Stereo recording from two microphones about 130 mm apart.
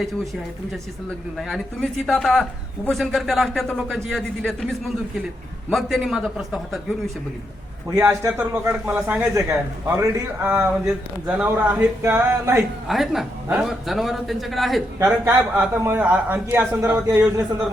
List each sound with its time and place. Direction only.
1.4 s a man's voice: centre (ahead or behind)
7.9 s speech: 15° right (ahead or behind)
9.3 s a man's voice: 25° right (ahead or behind)
12.9 s a man's voice: centre (ahead or behind)
14.9 s a man's voice: 20° right (ahead or behind)